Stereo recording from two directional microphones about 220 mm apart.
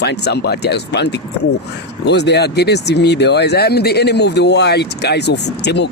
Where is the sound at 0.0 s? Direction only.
50° left (ahead or behind).